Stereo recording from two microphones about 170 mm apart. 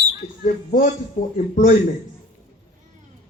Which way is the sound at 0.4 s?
50° left (ahead or behind).